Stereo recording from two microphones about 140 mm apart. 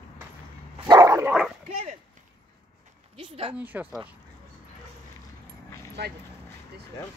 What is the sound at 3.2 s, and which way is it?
Speech, 40° right (ahead or behind).